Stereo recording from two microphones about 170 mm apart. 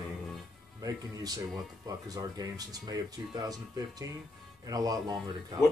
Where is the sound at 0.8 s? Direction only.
20° right (ahead or behind).